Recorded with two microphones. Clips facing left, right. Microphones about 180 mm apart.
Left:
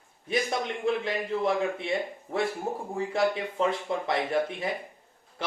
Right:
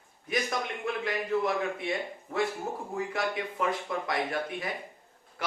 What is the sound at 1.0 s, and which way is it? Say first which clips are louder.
A man's voice: left 1 dB; 30° left (ahead or behind).